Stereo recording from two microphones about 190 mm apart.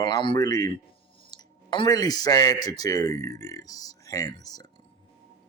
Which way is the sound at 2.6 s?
20° left (ahead or behind).